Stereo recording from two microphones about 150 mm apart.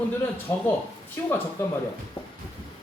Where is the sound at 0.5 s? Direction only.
20° left (ahead or behind).